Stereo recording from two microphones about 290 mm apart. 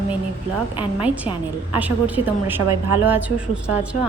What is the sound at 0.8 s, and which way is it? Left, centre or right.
A woman's voice, centre.